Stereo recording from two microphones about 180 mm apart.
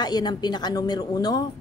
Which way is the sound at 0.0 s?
20° left (ahead or behind).